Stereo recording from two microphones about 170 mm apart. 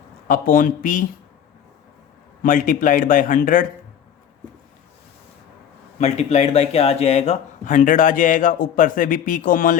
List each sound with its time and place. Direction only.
0.3 s speech: 55° left (ahead or behind)
2.4 s speech: 55° left (ahead or behind)
6.0 s speech: 40° left (ahead or behind)